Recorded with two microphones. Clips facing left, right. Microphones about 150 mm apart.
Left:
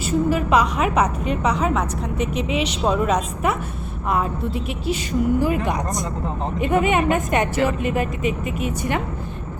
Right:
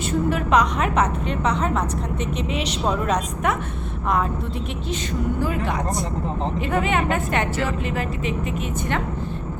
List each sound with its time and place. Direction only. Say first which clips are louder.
0.0 s a woman's voice: left 2 dB; 5° left (ahead or behind)
2.1 s speech: left 3 dB; 30° right (ahead or behind)
2.5 s a woman's voice: left 2 dB; 5° left (ahead or behind)
5.4 s a woman's voice: left 3 dB; 15° left (ahead or behind)